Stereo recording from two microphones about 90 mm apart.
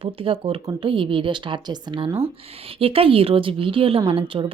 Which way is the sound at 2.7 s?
90° right.